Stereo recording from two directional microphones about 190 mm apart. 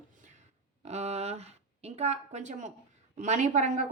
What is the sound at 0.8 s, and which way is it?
A woman's voice, 35° right (ahead or behind).